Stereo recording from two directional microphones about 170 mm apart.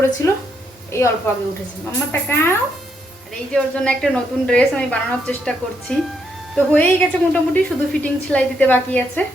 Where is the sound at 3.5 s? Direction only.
5° left (ahead or behind).